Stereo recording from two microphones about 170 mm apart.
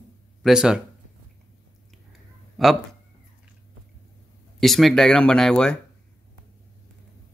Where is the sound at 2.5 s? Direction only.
Centre (ahead or behind).